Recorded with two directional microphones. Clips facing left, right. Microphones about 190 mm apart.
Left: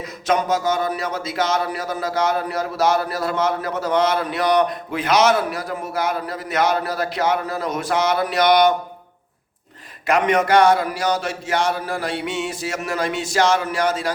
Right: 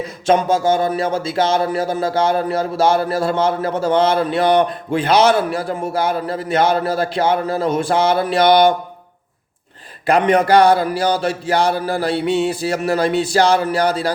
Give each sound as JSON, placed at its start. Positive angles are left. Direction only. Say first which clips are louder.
{"t": 0.3, "sound": "speech", "louder": "right 5 dB", "side_deg": -30}
{"t": 10.1, "sound": "music", "louder": "right 4 dB", "side_deg": -30}